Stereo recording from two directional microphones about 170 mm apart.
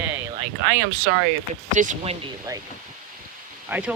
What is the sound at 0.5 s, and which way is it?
Speech, 90° right.